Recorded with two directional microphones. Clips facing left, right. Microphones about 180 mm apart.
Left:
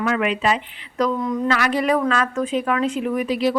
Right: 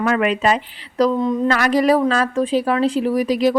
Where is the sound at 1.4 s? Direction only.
45° right (ahead or behind).